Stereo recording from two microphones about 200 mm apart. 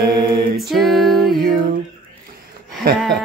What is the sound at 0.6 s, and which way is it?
Music, centre (ahead or behind).